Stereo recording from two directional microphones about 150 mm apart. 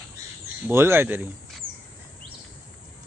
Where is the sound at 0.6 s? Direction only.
15° right (ahead or behind).